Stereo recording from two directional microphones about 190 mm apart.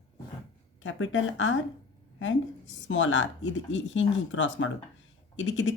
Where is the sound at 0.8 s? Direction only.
90° left.